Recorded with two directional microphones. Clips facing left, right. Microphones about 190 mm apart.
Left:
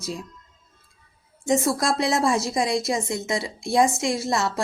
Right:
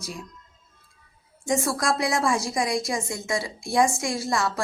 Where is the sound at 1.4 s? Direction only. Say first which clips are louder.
Left 3 dB; 20° left (ahead or behind).